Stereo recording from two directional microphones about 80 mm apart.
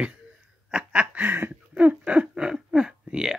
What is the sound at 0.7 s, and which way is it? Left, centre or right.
Laughter, centre.